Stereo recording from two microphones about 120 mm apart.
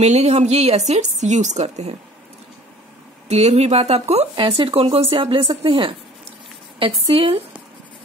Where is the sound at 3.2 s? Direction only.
65° right (ahead or behind).